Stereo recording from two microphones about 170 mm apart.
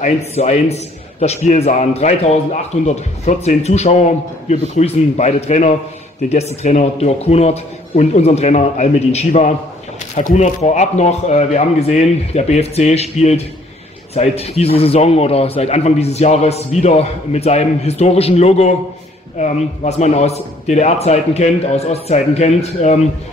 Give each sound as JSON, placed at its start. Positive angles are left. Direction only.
{"t": 0.0, "sound": "a man's voice", "side_deg": 40}